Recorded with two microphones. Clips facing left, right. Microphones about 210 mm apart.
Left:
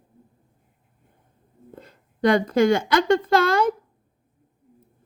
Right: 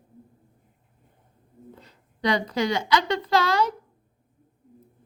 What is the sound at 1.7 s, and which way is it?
A woman's voice, 50° left (ahead or behind).